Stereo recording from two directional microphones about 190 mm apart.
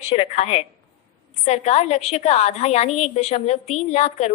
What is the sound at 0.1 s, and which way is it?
A woman's voice, 35° left (ahead or behind).